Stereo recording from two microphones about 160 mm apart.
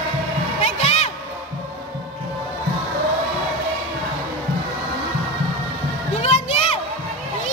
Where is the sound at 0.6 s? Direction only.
40° left (ahead or behind).